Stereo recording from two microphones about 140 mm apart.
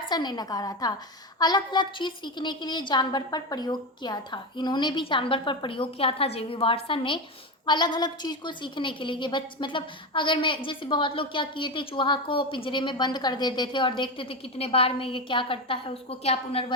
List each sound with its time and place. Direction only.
0.1 s a woman's voice: 30° left (ahead or behind)